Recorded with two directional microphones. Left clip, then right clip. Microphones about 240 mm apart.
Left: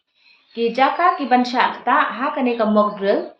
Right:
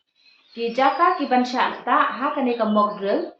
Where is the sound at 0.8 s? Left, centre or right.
Left.